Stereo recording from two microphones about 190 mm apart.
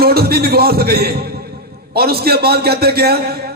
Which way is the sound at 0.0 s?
55° right (ahead or behind).